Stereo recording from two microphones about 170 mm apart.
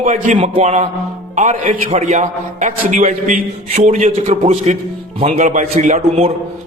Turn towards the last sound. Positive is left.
turn(degrees=-40)  # may be behind; listen again after turning